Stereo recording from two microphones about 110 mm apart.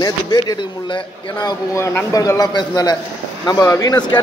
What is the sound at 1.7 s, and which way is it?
A man's voice, 25° left (ahead or behind).